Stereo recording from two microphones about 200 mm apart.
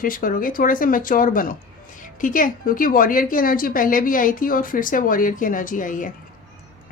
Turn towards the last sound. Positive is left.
turn(degrees=40)  # may be behind; listen again after turning